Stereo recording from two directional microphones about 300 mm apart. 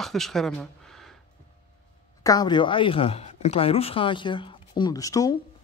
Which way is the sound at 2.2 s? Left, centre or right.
Centre.